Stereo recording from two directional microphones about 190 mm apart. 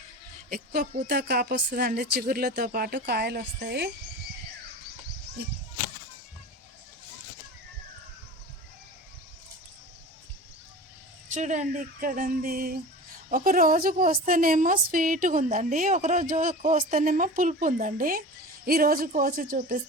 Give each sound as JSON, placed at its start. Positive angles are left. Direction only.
{"t": 0.5, "sound": "a woman's voice", "side_deg": -50}
{"t": 11.3, "sound": "a woman's voice", "side_deg": -40}